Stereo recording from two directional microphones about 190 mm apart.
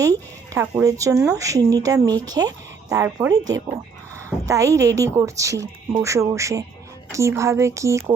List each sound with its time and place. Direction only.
0.0 s speech: 15° right (ahead or behind)
4.4 s speech: 15° right (ahead or behind)